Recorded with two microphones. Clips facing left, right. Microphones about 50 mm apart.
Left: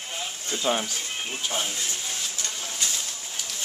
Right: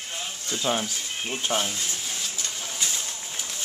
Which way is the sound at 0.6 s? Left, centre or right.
Centre.